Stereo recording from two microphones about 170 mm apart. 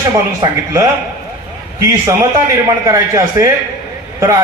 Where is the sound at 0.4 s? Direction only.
20° right (ahead or behind).